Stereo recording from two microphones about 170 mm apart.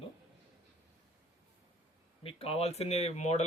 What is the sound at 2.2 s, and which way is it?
Speech, 35° left (ahead or behind).